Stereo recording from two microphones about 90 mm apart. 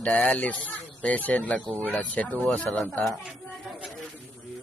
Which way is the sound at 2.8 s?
Centre (ahead or behind).